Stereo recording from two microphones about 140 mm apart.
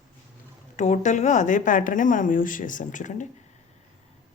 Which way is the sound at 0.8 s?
60° left (ahead or behind).